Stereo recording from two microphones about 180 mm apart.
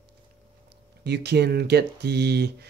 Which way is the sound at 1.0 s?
65° right (ahead or behind).